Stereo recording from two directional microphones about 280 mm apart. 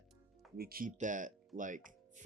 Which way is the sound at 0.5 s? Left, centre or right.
Right.